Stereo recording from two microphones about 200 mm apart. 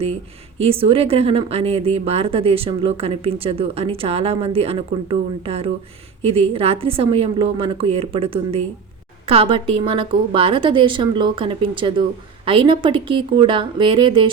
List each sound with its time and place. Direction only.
0.6 s speech: 30° right (ahead or behind)